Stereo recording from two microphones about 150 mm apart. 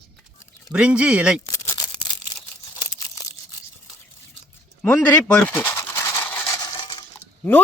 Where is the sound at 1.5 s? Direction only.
20° left (ahead or behind).